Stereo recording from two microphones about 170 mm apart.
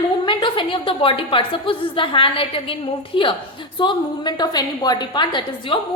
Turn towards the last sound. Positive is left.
turn(degrees=25)  # may be behind; listen again after turning